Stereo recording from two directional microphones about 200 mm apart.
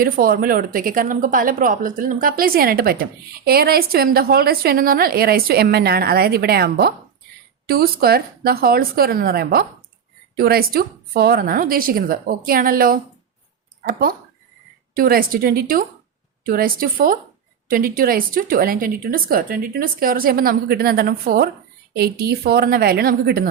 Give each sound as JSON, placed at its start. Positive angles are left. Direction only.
{"t": 0.0, "sound": "a woman's voice", "side_deg": -45}